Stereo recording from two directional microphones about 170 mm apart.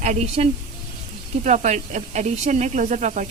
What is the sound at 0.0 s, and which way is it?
Speech, 45° right (ahead or behind).